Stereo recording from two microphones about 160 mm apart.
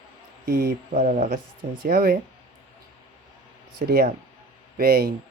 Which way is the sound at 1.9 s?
65° right (ahead or behind).